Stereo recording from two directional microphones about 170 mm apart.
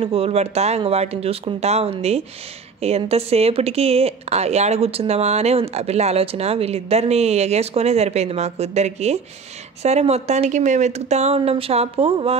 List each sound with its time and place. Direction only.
0.0 s speech: 35° right (ahead or behind)